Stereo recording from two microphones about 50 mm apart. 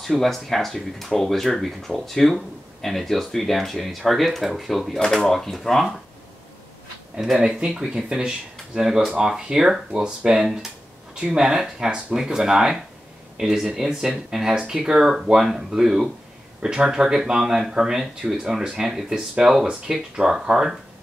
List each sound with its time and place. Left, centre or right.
0.0 s speech: centre
7.2 s speech: centre